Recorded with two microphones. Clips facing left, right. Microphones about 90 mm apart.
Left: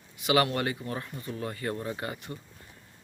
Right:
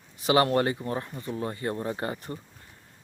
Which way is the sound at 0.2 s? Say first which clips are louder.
Right 3 dB; 35° right (ahead or behind).